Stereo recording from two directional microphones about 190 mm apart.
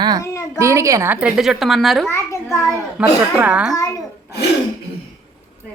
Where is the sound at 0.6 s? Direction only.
15° right (ahead or behind); by 2.0 s centre (ahead or behind).